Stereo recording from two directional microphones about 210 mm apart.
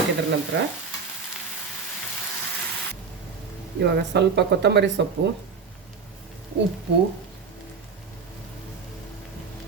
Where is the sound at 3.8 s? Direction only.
55° right (ahead or behind).